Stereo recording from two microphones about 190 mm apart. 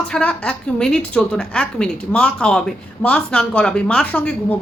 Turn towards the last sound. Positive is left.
turn(degrees=10)  # may be behind; listen again after turning